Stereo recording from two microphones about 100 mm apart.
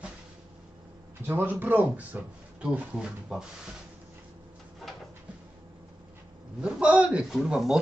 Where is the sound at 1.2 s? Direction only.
20° right (ahead or behind).